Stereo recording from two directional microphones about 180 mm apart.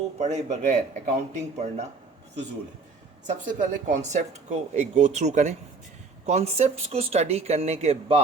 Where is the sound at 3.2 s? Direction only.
40° right (ahead or behind).